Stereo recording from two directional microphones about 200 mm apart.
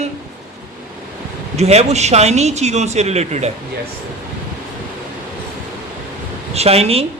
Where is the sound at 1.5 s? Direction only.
30° right (ahead or behind).